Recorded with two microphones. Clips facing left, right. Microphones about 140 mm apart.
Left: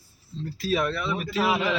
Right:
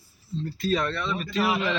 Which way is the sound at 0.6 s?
5° left (ahead or behind).